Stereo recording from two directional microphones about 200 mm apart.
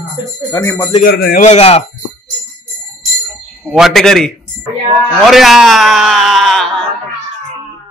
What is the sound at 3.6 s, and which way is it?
Speech, centre (ahead or behind).